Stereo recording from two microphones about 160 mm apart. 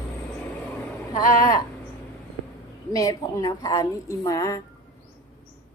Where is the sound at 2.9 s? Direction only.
20° left (ahead or behind).